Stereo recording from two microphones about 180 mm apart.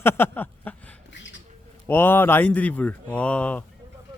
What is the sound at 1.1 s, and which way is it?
Bird, 90° left.